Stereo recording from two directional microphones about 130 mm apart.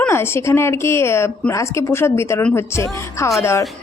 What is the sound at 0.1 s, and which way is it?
A woman's voice, 20° left (ahead or behind).